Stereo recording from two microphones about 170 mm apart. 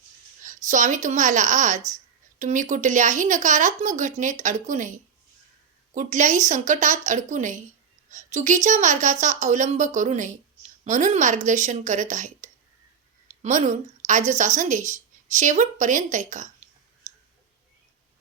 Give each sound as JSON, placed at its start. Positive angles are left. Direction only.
{"t": 0.4, "sound": "a woman's voice", "side_deg": -50}